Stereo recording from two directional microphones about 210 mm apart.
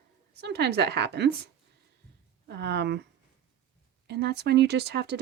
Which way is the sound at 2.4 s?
55° right (ahead or behind).